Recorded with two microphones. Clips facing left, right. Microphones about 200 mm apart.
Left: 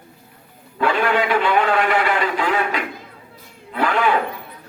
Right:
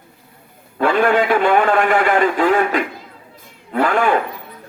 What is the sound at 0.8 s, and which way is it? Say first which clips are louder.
A man's voice: right 4 dB; 50° right (ahead or behind).